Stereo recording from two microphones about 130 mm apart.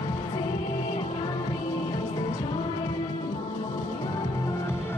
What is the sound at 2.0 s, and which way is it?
Music, 20° left (ahead or behind).